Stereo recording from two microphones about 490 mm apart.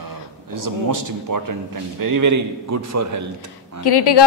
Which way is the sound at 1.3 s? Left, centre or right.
Right.